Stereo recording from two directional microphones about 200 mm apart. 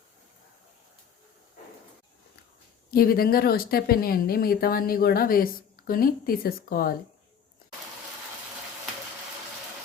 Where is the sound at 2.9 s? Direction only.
50° left (ahead or behind).